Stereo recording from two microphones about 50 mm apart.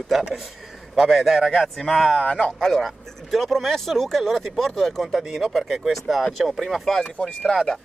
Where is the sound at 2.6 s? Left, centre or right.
Centre.